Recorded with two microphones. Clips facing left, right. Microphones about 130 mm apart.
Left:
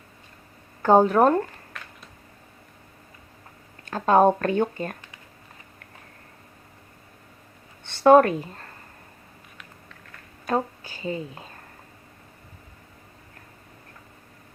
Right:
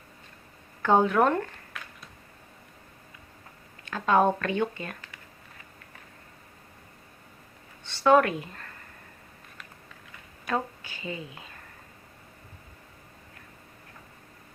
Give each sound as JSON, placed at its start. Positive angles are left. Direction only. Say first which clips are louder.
{"t": 0.8, "sound": "speech", "louder": "left 5 dB", "side_deg": 40}
{"t": 3.8, "sound": "speech", "louder": "left 5 dB", "side_deg": 40}
{"t": 7.9, "sound": "speech", "louder": "left 6 dB", "side_deg": 50}
{"t": 10.4, "sound": "a woman's voice", "louder": "left 4 dB", "side_deg": 35}